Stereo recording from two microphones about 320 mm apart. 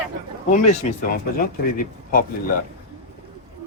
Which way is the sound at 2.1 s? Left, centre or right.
Left.